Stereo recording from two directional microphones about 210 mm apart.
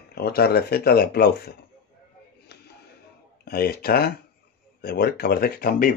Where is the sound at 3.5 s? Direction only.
45° left (ahead or behind).